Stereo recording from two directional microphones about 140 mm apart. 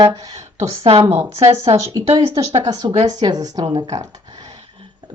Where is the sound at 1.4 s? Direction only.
45° right (ahead or behind).